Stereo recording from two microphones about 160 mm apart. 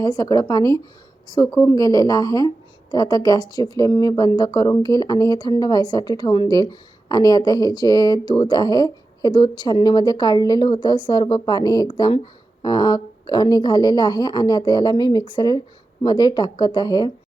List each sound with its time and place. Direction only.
0.0 s speech: 20° left (ahead or behind)